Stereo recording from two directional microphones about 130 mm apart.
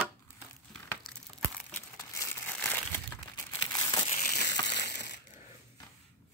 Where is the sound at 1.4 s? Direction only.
15° left (ahead or behind).